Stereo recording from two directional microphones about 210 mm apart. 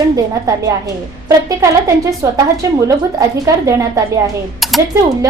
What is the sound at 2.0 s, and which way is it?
A woman's voice, 15° right (ahead or behind).